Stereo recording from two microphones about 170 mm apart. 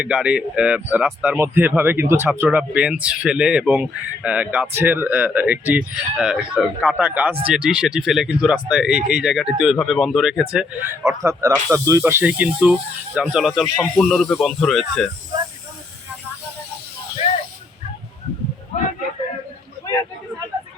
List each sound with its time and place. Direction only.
0.0 s speech: 5° right (ahead or behind)
11.0 s speech: 20° right (ahead or behind); by 15.1 s centre (ahead or behind)
18.7 s a sound: 40° left (ahead or behind)